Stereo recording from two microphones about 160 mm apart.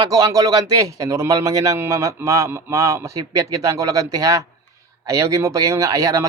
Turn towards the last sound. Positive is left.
turn(degrees=-20)  # may be behind; listen again after turning